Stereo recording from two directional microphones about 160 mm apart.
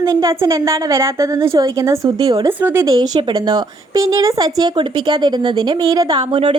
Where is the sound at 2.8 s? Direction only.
25° right (ahead or behind).